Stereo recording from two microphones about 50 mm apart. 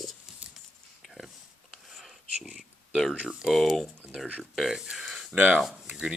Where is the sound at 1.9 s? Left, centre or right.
Centre.